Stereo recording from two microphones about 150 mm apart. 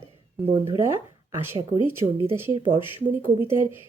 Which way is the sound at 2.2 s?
15° right (ahead or behind).